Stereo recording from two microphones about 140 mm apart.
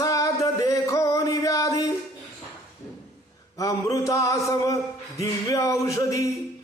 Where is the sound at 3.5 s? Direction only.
25° left (ahead or behind).